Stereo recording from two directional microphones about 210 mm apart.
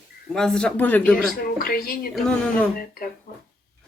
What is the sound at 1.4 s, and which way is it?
Speech, 45° left (ahead or behind).